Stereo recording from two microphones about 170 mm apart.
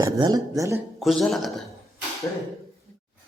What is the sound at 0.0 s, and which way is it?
Speech, 20° right (ahead or behind).